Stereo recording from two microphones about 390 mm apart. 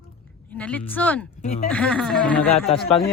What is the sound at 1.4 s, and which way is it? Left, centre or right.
Speech, centre.